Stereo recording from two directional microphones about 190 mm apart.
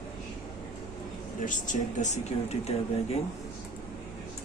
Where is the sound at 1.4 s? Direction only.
40° left (ahead or behind).